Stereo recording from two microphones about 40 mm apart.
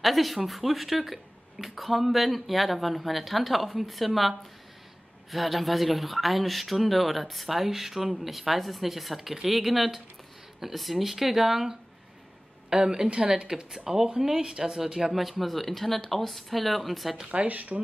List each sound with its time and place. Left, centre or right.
0.0 s speech: centre
17.3 s speech: right